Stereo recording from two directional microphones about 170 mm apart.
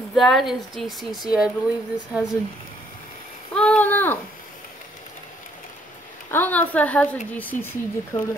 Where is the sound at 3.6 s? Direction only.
10° left (ahead or behind).